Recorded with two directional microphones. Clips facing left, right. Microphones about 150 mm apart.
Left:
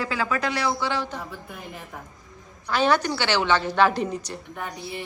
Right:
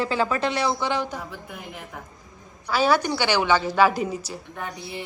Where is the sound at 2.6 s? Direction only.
10° right (ahead or behind).